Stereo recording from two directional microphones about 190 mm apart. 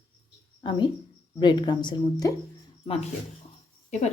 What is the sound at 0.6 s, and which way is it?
A woman's voice, 25° left (ahead or behind).